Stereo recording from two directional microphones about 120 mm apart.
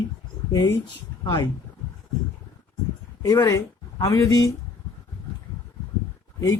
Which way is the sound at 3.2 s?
30° left (ahead or behind).